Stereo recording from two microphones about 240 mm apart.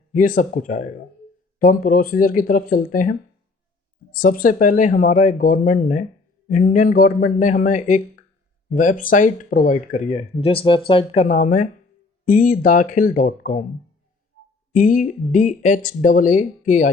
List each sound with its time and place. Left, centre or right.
0.1 s speech: left
4.2 s speech: left
14.7 s speech: left